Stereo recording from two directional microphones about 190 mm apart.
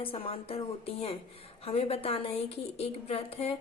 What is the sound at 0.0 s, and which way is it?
A woman's voice, 30° left (ahead or behind).